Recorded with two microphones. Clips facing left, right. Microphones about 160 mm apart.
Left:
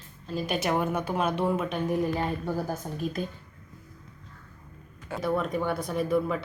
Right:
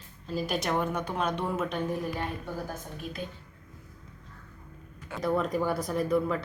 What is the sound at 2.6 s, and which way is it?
Speech, 45° left (ahead or behind).